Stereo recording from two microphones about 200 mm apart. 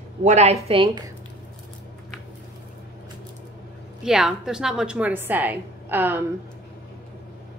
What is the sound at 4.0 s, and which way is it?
A woman's voice, centre (ahead or behind).